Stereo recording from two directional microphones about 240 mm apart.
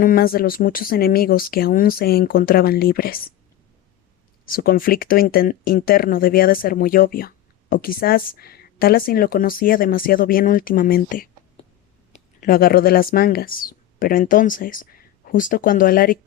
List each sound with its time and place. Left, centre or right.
0.0 s speech: left
4.4 s speech: left